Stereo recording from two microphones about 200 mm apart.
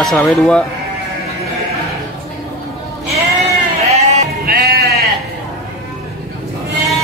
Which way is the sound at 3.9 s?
35° right (ahead or behind).